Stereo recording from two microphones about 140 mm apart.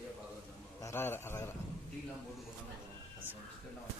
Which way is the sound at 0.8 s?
15° left (ahead or behind).